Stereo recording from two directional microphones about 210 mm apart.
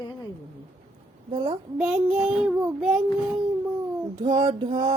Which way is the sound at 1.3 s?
25° right (ahead or behind).